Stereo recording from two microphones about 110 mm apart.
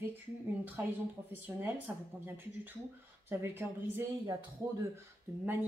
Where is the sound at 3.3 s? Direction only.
20° right (ahead or behind).